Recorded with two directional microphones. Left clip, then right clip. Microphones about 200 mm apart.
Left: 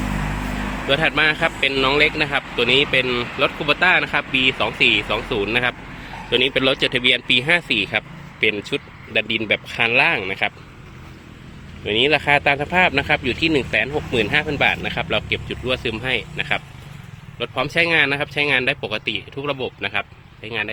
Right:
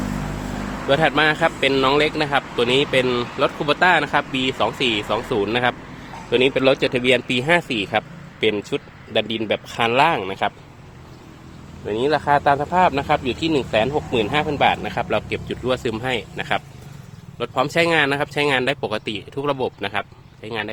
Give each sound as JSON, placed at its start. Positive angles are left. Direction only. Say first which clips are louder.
{"t": 0.9, "sound": "speech", "louder": "right 1 dB", "side_deg": -15}
{"t": 12.4, "sound": "speech", "louder": "even", "side_deg": 0}